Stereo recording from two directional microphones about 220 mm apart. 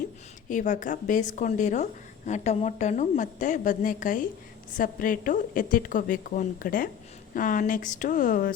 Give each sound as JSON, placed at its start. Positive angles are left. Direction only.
{"t": 0.4, "sound": "speech", "side_deg": 35}